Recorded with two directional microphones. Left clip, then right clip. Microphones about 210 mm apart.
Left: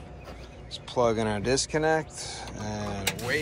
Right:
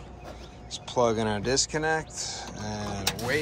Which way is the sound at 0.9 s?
15° right (ahead or behind).